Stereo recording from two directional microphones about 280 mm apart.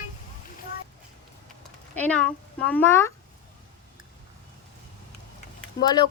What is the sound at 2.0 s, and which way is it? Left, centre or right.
Speech, centre.